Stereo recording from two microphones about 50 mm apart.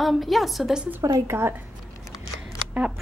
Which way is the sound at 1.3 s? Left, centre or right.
Right.